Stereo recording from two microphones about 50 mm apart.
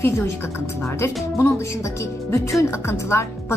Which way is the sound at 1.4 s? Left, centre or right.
Left.